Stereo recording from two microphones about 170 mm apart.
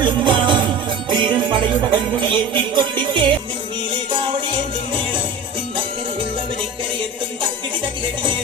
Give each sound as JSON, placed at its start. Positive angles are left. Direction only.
{"t": 0.0, "sound": "music", "side_deg": -30}
{"t": 1.1, "sound": "jingle bell", "side_deg": -30}
{"t": 3.9, "sound": "music", "side_deg": -30}
{"t": 8.0, "sound": "music", "side_deg": -30}